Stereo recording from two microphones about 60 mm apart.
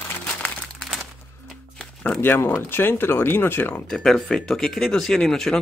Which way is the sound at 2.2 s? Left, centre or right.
Left.